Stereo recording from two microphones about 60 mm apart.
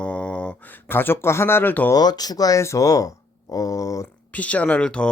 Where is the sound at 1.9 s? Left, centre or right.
Left.